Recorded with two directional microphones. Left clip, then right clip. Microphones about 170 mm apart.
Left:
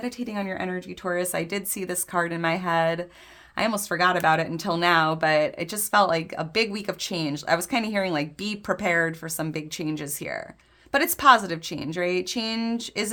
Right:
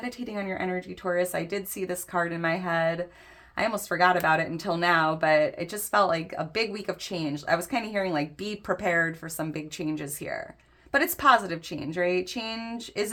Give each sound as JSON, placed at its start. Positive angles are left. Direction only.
{"t": 0.0, "sound": "speech", "side_deg": 35}